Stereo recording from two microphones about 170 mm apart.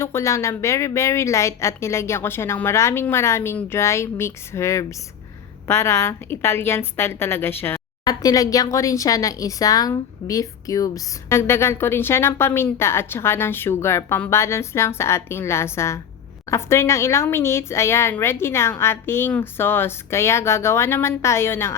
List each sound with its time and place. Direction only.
0.0 s a woman's voice: 15° left (ahead or behind)